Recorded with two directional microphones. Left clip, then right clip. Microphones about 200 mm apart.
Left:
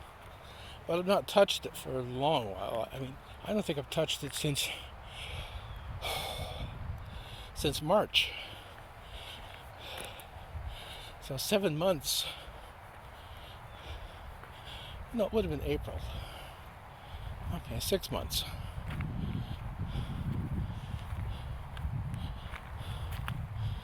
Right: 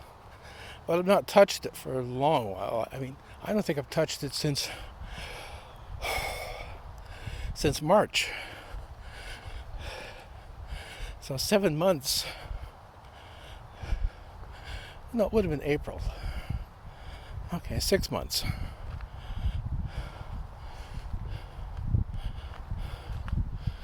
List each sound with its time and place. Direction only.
0.9 s speech: 40° right (ahead or behind)
6.0 s snort: 45° right (ahead or behind)
7.6 s speech: 45° right (ahead or behind)
11.3 s speech: 40° right (ahead or behind)
15.1 s speech: 45° right (ahead or behind)
17.5 s speech: 40° right (ahead or behind)